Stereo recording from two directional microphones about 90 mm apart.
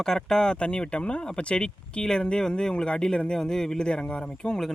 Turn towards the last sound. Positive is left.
turn(degrees=5)  # may be behind; listen again after turning